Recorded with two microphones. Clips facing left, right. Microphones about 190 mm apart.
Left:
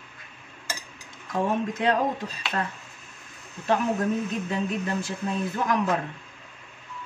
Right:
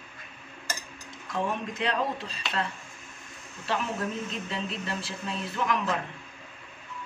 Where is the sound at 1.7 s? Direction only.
50° left (ahead or behind).